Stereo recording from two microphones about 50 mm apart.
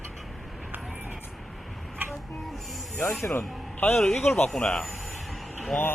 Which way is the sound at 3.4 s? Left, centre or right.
Left.